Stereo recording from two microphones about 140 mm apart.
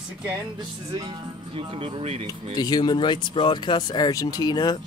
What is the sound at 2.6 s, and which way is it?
Speech, 30° left (ahead or behind).